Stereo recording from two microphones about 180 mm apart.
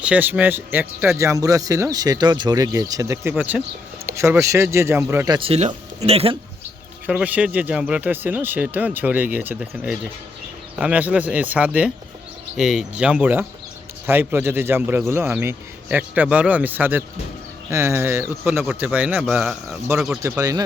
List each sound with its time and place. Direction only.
0.0 s speech: 10° right (ahead or behind)
5.4 s speech: 35° right (ahead or behind)
7.1 s speech: 5° right (ahead or behind)
20.2 s speech: 15° right (ahead or behind)